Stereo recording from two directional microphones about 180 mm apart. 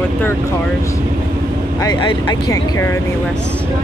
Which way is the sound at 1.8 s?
25° left (ahead or behind).